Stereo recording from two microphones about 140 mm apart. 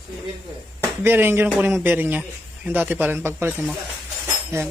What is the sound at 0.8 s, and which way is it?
Speech, 15° right (ahead or behind).